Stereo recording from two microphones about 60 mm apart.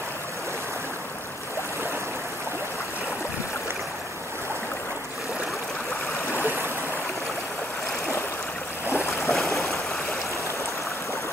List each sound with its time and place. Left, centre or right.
8.8 s boat: left